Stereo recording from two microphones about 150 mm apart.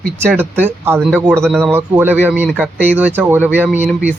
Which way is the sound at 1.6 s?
15° right (ahead or behind).